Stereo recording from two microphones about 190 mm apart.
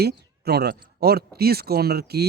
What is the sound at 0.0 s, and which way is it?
Speech, 60° right (ahead or behind).